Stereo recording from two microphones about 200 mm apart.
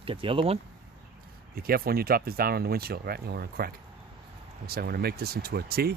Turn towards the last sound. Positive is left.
turn(degrees=-50)  # may be behind; listen again after turning